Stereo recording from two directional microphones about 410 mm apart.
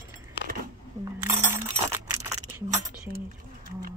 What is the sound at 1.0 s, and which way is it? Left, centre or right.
Coin, centre.